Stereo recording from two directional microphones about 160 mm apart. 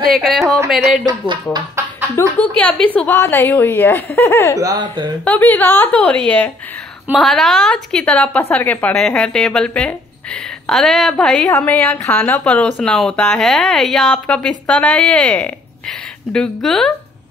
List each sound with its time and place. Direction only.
0.1 s a woman's voice: centre (ahead or behind)
1.0 s speech: 30° right (ahead or behind)
2.2 s a woman's voice: 20° left (ahead or behind)
4.6 s speech: 20° right (ahead or behind)
5.2 s a woman's voice: 10° left (ahead or behind)